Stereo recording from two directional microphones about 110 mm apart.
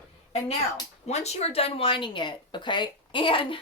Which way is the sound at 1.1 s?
80° left.